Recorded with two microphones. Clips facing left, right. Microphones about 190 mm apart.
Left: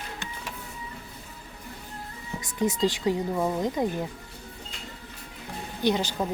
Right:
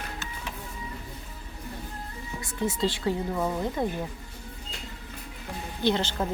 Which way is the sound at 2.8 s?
15° left (ahead or behind).